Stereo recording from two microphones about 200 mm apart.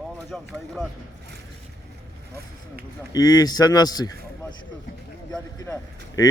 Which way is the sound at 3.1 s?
20° left (ahead or behind).